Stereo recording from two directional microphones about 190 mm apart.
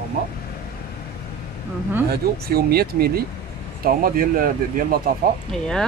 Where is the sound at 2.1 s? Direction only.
55° right (ahead or behind).